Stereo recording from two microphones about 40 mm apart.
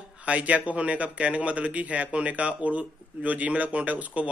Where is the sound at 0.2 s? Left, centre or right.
Right.